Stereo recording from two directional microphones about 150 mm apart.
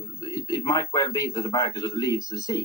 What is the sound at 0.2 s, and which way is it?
A man's voice, 20° left (ahead or behind).